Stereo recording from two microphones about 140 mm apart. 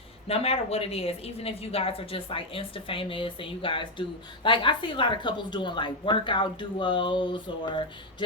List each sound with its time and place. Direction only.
0.3 s a woman's voice: 45° left (ahead or behind)